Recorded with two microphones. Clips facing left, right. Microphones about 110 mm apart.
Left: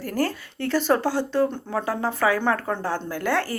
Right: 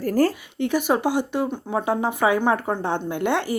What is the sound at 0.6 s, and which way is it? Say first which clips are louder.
Speech: right 1 dB; 15° right (ahead or behind).